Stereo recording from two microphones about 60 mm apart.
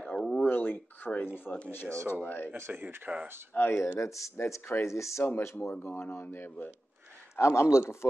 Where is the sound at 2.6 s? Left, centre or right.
Right.